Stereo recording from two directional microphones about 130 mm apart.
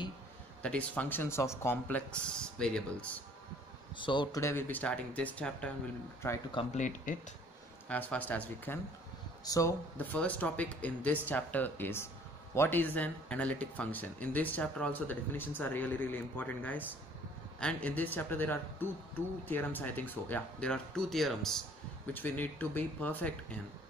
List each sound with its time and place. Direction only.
0.6 s speech: 10° left (ahead or behind)
3.9 s speech: 40° left (ahead or behind)
4.4 s speech: 20° left (ahead or behind)
6.7 s speech: 70° left (ahead or behind)
7.9 s speech: 10° left (ahead or behind)
9.4 s speech: 25° left (ahead or behind)
9.9 s speech: 10° left (ahead or behind)
22.1 s speech: 15° left (ahead or behind)